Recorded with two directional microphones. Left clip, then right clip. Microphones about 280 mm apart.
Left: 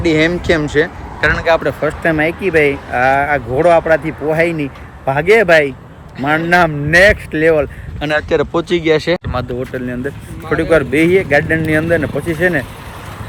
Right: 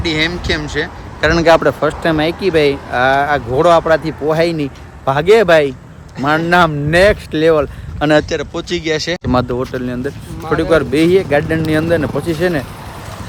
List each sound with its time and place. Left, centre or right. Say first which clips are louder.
0.0 s speech: left 3 dB; centre
1.5 s speech: right 5 dB; right
1.8 s speech: even; centre
7.9 s speech: right 4 dB; right
8.3 s speech: left 5 dB; centre